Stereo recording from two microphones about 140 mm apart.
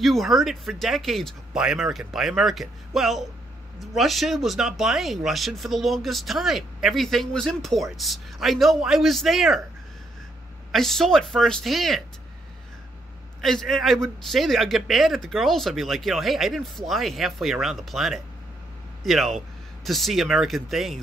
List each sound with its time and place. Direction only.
0.0 s speech: centre (ahead or behind)
10.7 s speech: centre (ahead or behind)
13.4 s speech: centre (ahead or behind)